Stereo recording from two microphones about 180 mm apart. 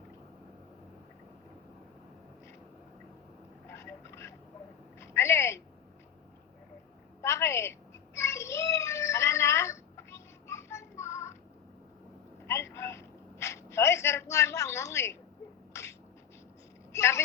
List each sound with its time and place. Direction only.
3.7 s vehicle: 15° left (ahead or behind)
4.9 s a sound: 15° left (ahead or behind)
7.2 s child singing: 15° left (ahead or behind)
12.7 s whimper: 15° left (ahead or behind)
15.7 s beatboxing: 15° left (ahead or behind)
16.9 s a sound: 15° left (ahead or behind)